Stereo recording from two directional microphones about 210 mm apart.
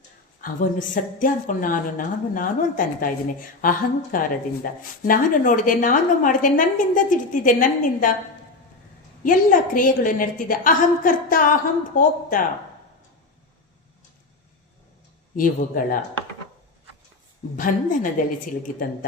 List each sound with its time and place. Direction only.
0.4 s speech: 40° left (ahead or behind)
9.2 s speech: 40° left (ahead or behind)
15.4 s speech: 40° left (ahead or behind)
17.6 s speech: 40° left (ahead or behind)